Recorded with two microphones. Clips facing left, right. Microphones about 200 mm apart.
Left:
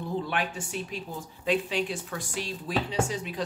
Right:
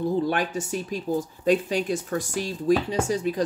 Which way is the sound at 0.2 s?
40° right (ahead or behind).